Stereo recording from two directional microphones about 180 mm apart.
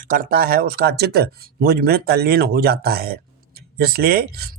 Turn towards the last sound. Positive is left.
turn(degrees=-60)  # may be behind; listen again after turning